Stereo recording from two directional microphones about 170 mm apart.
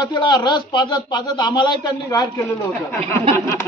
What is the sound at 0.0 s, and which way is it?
A man's voice, 25° left (ahead or behind).